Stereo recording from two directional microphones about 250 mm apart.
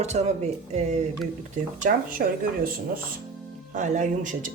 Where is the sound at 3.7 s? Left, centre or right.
Right.